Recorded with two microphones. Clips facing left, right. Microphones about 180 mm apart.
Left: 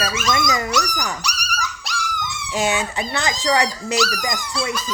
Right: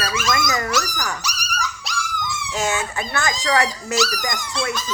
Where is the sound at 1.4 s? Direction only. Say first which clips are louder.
Even; centre (ahead or behind).